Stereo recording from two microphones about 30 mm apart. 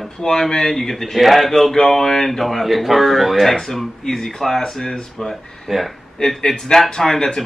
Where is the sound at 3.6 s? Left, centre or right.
Centre.